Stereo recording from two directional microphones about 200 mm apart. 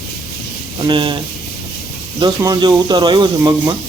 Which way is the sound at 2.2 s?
20° right (ahead or behind).